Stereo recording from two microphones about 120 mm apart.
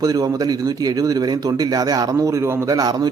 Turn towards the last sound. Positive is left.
turn(degrees=-30)  # may be behind; listen again after turning